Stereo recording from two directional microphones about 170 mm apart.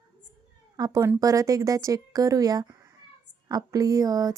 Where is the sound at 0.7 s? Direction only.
20° right (ahead or behind).